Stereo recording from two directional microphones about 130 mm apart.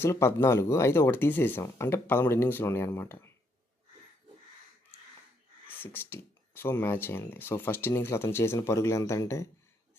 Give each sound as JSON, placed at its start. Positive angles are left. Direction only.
{"t": 0.0, "sound": "speech", "side_deg": 20}
{"t": 5.6, "sound": "speech", "side_deg": 15}